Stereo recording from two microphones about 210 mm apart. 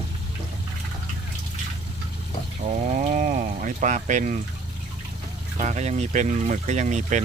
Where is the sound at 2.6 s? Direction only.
30° right (ahead or behind).